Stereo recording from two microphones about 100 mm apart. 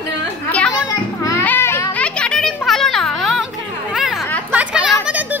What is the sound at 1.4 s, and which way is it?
Children playing, 25° left (ahead or behind).